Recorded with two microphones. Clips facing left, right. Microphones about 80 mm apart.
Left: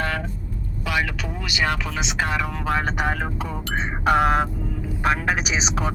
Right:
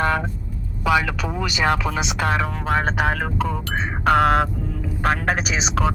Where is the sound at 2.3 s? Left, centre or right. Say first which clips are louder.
Right 3 dB; right.